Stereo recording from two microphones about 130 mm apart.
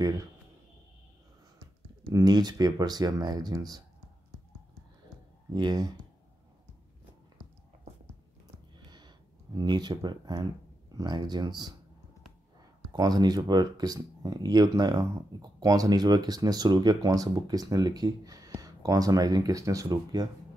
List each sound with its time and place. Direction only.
2.0 s speech: 30° right (ahead or behind)
5.5 s speech: 30° right (ahead or behind)
8.9 s a sound: 35° right (ahead or behind)
11.0 s speech: 30° right (ahead or behind)
12.9 s speech: 30° right (ahead or behind)